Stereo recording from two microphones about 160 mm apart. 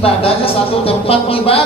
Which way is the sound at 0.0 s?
35° left (ahead or behind).